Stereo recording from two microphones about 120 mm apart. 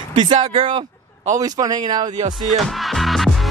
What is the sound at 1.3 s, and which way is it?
Speech, 30° right (ahead or behind).